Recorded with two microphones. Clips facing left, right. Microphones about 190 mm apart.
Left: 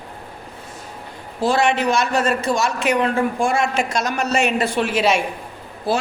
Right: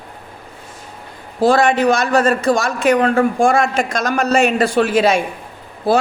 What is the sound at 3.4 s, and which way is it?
A man's voice, 50° right (ahead or behind).